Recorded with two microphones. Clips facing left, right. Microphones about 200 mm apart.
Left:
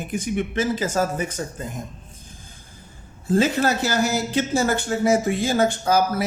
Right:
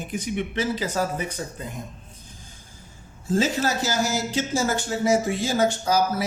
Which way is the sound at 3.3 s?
60° left (ahead or behind).